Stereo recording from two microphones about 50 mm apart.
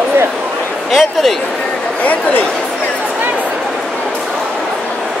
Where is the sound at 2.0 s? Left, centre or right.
Left.